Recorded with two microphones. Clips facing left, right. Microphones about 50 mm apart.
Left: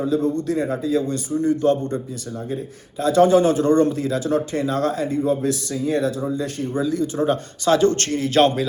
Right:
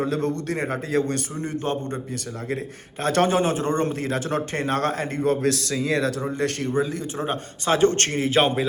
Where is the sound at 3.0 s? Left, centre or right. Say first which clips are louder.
Left 5 dB; right.